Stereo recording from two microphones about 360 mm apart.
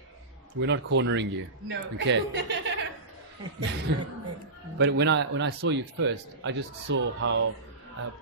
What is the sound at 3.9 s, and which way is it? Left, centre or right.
Speech, right.